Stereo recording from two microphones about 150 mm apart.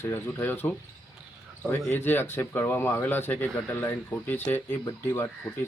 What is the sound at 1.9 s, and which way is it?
A man's voice, 15° left (ahead or behind).